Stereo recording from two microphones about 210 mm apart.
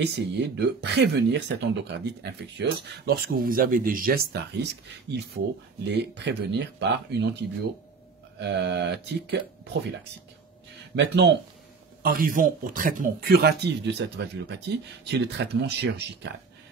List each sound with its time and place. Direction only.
0.0 s speech: 55° right (ahead or behind)
8.4 s speech: 55° right (ahead or behind)
11.0 s speech: 55° right (ahead or behind)
12.0 s speech: 45° right (ahead or behind)